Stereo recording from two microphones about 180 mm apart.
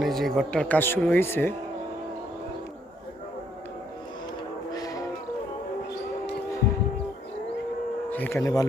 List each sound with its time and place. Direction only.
0.0 s speech: centre (ahead or behind)
4.7 s music: 20° left (ahead or behind)
8.1 s speech: 10° left (ahead or behind)